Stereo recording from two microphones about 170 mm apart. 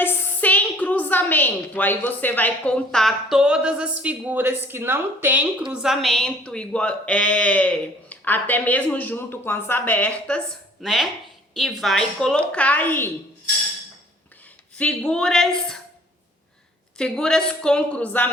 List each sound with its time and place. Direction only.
0.0 s a woman's voice: 10° left (ahead or behind)
14.8 s a woman's voice: 5° left (ahead or behind)
17.0 s a woman's voice: 5° left (ahead or behind)